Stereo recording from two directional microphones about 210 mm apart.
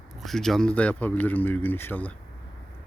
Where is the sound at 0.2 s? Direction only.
Centre (ahead or behind).